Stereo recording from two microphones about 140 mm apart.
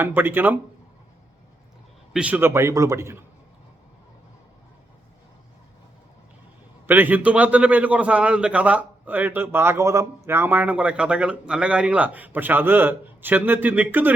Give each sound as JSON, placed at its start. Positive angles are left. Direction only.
{"t": 0.0, "sound": "speech", "side_deg": -15}
{"t": 2.1, "sound": "a man's voice", "side_deg": -10}
{"t": 6.8, "sound": "speech", "side_deg": -15}